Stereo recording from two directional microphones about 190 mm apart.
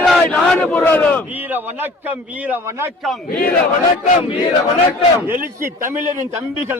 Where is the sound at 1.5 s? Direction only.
10° right (ahead or behind).